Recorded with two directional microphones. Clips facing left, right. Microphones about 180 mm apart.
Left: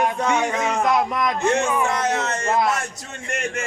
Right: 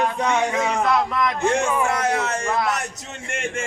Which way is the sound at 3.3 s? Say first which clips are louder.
Left 1 dB; 25° right (ahead or behind).